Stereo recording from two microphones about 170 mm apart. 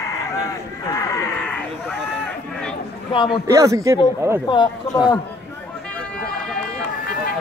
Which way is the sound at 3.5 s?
20° right (ahead or behind).